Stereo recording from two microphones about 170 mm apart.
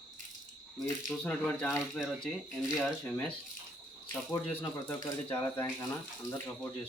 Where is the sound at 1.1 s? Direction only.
5° left (ahead or behind).